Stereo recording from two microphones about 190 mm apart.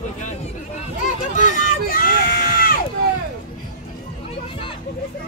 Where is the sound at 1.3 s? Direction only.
45° left (ahead or behind).